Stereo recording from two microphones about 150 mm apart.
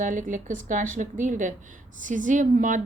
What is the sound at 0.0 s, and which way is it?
A woman's voice, 60° right (ahead or behind).